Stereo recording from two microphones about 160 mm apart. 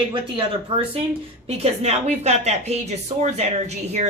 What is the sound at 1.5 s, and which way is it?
Speech, 40° right (ahead or behind).